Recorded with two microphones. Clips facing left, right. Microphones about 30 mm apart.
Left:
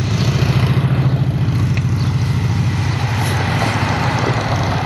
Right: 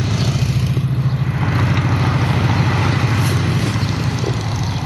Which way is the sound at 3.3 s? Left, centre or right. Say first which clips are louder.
Left 2 dB; left.